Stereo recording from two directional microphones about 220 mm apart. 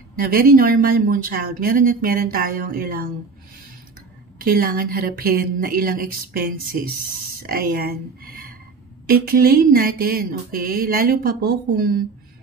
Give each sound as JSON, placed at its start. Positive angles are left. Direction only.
{"t": 0.2, "sound": "mantra", "side_deg": -40}
{"t": 4.4, "sound": "mantra", "side_deg": -40}